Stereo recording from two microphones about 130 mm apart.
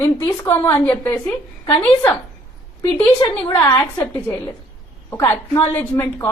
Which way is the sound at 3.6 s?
15° left (ahead or behind).